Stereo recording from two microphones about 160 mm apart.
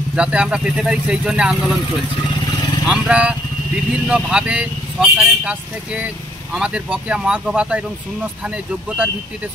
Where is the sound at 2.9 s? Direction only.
5° right (ahead or behind).